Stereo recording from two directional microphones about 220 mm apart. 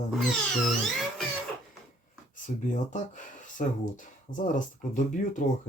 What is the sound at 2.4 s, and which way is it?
Speech, 35° left (ahead or behind).